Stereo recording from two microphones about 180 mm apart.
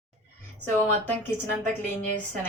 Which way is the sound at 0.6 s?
10° left (ahead or behind).